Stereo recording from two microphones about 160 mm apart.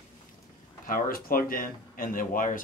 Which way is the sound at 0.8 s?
65° left (ahead or behind).